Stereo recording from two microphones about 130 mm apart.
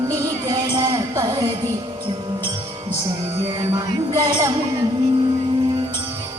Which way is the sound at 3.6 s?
25° right (ahead or behind).